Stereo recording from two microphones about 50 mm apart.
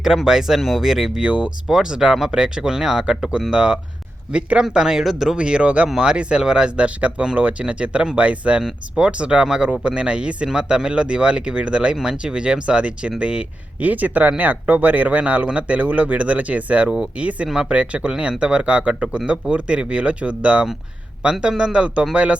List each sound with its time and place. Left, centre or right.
0.3 s speech: centre
1.2 s speech: right
1.6 s speech: centre
5.4 s speech: right
13.8 s speech: right
17.5 s speech: centre